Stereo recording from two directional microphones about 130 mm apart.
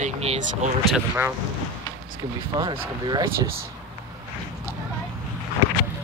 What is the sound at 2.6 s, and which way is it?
Speech, 30° right (ahead or behind).